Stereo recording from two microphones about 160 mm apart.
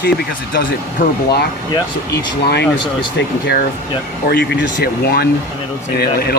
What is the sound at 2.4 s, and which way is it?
Speech, 90° left.